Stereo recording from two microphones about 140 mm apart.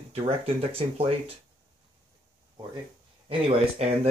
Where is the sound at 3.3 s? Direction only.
45° right (ahead or behind).